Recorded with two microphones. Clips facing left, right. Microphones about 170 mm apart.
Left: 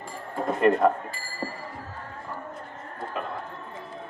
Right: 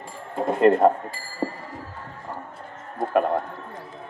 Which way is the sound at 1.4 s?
25° right (ahead or behind).